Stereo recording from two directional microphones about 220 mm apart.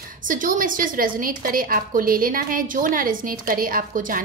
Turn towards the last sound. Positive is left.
turn(degrees=-40)  # may be behind; listen again after turning